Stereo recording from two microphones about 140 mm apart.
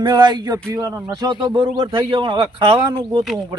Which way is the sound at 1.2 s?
35° right (ahead or behind).